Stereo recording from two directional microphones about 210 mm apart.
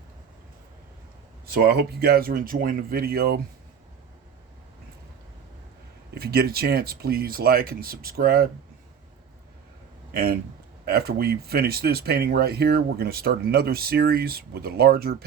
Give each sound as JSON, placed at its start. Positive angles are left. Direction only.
{"t": 1.6, "sound": "speech", "side_deg": -50}
{"t": 6.1, "sound": "speech", "side_deg": -45}
{"t": 10.1, "sound": "a man's voice", "side_deg": -45}